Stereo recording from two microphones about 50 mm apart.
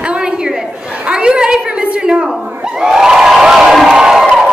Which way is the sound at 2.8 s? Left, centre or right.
Centre.